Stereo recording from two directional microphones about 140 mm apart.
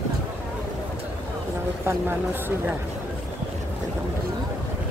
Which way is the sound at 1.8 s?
15° right (ahead or behind).